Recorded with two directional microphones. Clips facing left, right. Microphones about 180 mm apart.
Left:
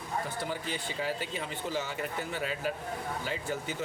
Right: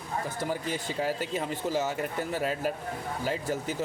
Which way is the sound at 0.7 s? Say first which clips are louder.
Right 4 dB; 45° right (ahead or behind).